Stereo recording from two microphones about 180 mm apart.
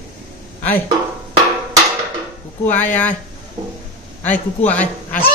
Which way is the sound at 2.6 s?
10° left (ahead or behind).